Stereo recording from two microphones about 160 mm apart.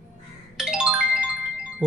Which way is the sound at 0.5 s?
5° right (ahead or behind).